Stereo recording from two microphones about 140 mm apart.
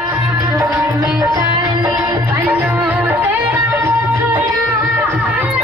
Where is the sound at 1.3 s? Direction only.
25° right (ahead or behind).